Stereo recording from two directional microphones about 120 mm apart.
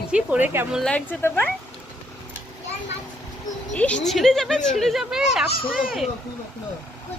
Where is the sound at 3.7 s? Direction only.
10° left (ahead or behind).